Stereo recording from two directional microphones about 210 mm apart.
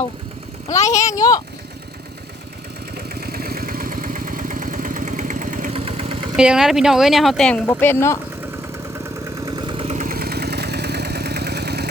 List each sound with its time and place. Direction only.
1.1 s speech: 15° left (ahead or behind)
2.9 s vehicle: 45° right (ahead or behind); by 6.3 s 25° right (ahead or behind)
6.3 s speech: 5° right (ahead or behind); by 8.2 s 10° left (ahead or behind)
9.3 s vehicle: 20° right (ahead or behind); by 11.9 s 50° right (ahead or behind)